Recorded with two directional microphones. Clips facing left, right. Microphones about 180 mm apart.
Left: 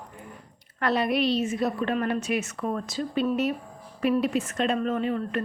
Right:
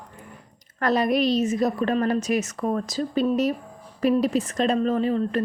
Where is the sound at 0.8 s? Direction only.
40° right (ahead or behind).